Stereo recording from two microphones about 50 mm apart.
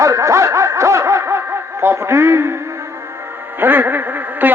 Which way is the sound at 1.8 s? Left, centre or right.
Right.